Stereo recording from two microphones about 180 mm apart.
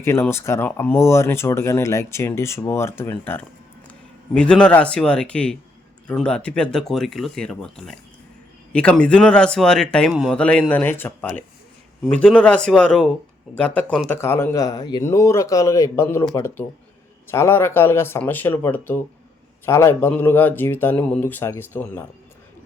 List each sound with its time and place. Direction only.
0.0 s speech: 15° left (ahead or behind)